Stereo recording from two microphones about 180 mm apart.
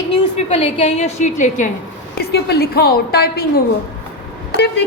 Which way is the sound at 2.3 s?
60° left (ahead or behind).